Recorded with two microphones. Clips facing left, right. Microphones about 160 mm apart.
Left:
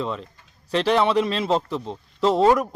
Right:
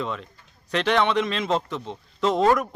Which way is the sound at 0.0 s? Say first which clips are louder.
Left 2 dB; 35° left (ahead or behind).